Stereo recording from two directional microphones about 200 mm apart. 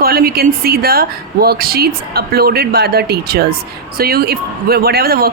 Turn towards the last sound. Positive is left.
turn(degrees=-50)  # may be behind; listen again after turning